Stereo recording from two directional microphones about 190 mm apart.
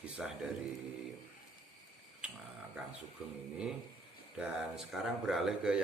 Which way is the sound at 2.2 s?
5° right (ahead or behind).